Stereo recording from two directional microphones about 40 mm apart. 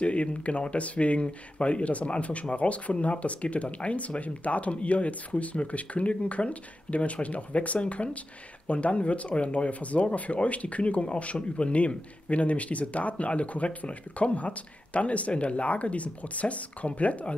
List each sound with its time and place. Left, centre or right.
0.0 s speech: left